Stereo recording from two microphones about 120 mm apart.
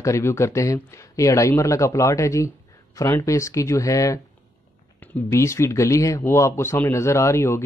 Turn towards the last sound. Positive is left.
turn(degrees=25)  # may be behind; listen again after turning